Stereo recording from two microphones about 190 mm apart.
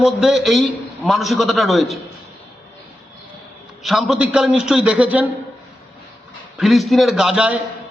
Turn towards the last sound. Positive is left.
turn(degrees=-5)  # may be behind; listen again after turning